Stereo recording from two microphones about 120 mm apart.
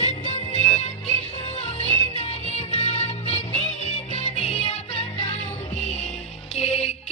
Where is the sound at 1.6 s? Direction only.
60° left (ahead or behind).